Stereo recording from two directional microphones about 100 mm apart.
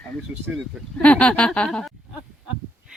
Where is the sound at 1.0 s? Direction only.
10° left (ahead or behind).